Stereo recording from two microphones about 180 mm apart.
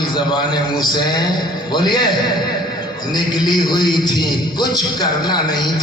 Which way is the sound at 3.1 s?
25° left (ahead or behind).